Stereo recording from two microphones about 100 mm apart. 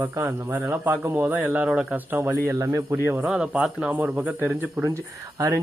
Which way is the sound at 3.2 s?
5° right (ahead or behind).